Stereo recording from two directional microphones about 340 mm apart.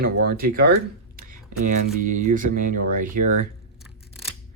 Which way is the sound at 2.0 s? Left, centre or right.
Right.